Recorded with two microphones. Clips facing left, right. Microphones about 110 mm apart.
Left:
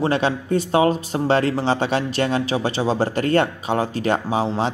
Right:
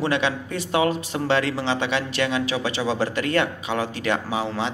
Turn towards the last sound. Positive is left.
turn(degrees=40)  # may be behind; listen again after turning